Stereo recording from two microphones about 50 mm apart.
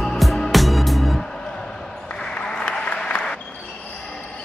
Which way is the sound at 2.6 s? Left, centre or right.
Centre.